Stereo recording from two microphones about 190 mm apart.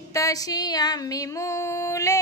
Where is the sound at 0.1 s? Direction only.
15° left (ahead or behind).